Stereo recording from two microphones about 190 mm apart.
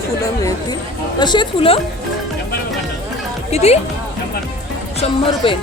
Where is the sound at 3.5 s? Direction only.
35° left (ahead or behind).